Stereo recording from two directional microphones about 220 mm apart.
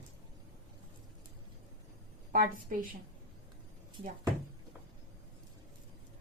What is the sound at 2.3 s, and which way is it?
Speech, 35° right (ahead or behind).